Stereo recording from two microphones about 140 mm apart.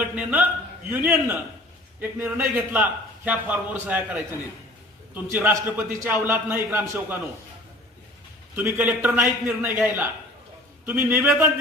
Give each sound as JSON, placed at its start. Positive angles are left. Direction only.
{"t": 0.0, "sound": "a man's voice", "side_deg": -10}
{"t": 8.5, "sound": "a man's voice", "side_deg": -15}
{"t": 10.8, "sound": "a man's voice", "side_deg": -15}